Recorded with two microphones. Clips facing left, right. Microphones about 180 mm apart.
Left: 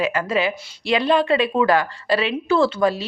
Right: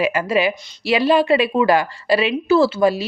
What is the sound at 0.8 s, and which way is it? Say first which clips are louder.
A woman's voice: right 3 dB; 5° right (ahead or behind).